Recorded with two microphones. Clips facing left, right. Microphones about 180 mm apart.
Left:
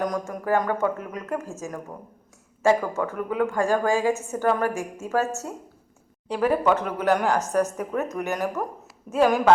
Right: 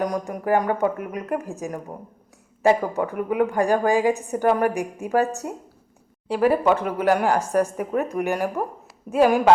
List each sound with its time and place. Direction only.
0.3 s a woman's voice: 15° right (ahead or behind)